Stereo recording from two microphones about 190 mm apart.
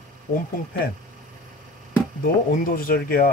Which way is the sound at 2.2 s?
50° left (ahead or behind).